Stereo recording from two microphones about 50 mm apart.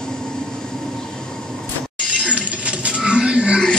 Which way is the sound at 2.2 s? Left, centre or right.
Right.